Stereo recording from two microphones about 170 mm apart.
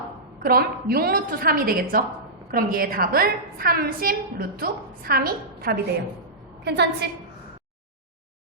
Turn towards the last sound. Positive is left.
turn(degrees=-75)  # may be behind; listen again after turning